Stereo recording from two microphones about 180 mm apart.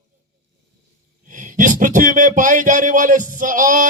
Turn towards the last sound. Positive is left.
turn(degrees=-45)  # may be behind; listen again after turning